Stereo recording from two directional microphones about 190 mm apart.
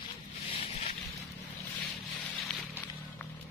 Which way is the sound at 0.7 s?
35° left (ahead or behind).